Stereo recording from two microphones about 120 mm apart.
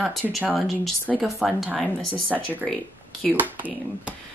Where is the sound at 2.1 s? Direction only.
10° left (ahead or behind).